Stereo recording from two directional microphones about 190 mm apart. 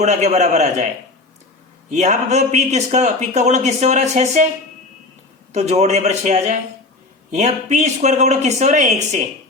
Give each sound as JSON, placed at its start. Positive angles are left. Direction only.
{"t": 0.0, "sound": "a man's voice", "side_deg": -35}
{"t": 1.9, "sound": "a man's voice", "side_deg": -40}
{"t": 5.5, "sound": "a man's voice", "side_deg": -35}